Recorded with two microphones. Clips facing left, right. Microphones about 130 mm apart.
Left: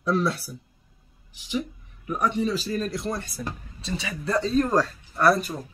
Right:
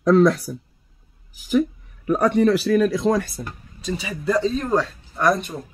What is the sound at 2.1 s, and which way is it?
Speech, 80° right.